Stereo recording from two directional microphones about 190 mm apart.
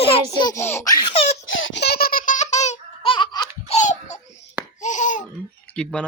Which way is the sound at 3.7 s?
40° left (ahead or behind).